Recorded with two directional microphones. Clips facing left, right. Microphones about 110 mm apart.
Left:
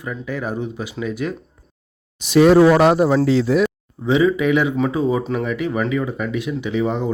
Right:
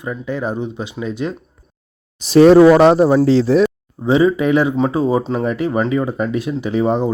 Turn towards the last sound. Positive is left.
turn(degrees=-35)  # may be behind; listen again after turning